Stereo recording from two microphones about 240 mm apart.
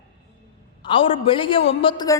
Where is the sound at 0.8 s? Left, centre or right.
Left.